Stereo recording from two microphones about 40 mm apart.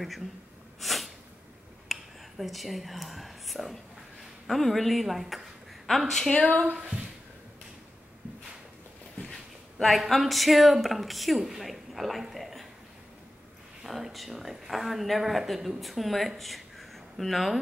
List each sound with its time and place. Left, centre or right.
0.7 s snort: centre
1.9 s speech: centre
6.3 s speech: left
9.3 s speech: centre
13.8 s speech: centre